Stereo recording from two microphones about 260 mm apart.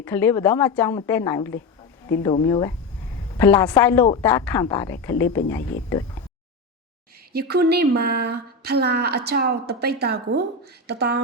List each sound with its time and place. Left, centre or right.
0.0 s a woman's voice: centre
7.3 s speech: right